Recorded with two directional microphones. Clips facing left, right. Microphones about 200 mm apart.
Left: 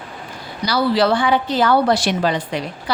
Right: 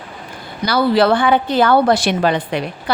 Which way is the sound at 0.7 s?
55° right (ahead or behind).